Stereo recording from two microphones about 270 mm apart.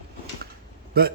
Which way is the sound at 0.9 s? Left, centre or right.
Right.